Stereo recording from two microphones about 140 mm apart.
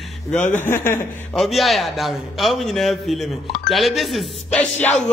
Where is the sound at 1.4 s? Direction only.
Centre (ahead or behind).